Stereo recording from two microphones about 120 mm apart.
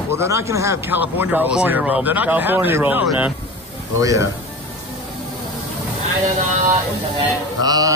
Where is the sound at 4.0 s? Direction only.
30° right (ahead or behind).